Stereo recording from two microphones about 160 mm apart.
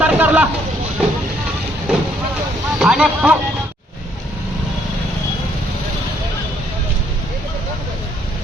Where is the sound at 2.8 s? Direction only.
5° right (ahead or behind).